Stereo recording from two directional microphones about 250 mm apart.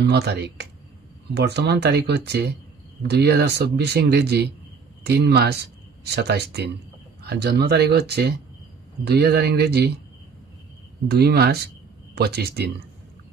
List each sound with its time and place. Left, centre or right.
0.0 s speech: right
11.1 s speech: right